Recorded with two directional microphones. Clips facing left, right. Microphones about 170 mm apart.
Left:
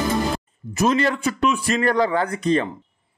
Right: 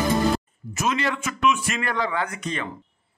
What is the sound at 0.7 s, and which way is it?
A man's voice, 35° left (ahead or behind).